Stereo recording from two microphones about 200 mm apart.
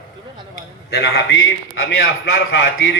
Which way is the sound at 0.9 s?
55° left (ahead or behind).